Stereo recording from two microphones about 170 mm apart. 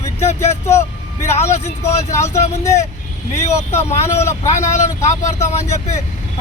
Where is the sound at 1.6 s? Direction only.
15° left (ahead or behind).